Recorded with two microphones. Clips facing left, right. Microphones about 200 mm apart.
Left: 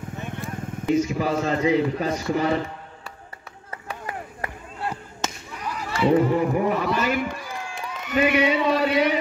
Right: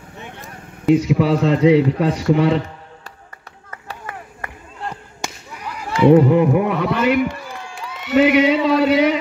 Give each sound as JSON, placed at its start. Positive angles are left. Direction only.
{"t": 0.8, "sound": "a man's voice", "side_deg": -70}
{"t": 5.9, "sound": "a man's voice", "side_deg": -60}
{"t": 8.0, "sound": "speech", "side_deg": -80}